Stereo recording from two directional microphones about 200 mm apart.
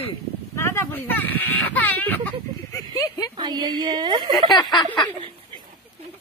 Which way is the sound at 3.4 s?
20° right (ahead or behind).